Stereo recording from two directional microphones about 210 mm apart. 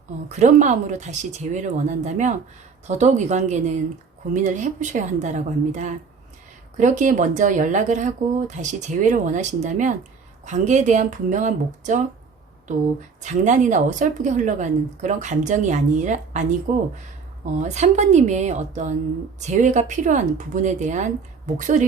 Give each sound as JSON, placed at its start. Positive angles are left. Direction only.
{"t": 0.3, "sound": "speech", "side_deg": -35}
{"t": 13.2, "sound": "speech", "side_deg": -35}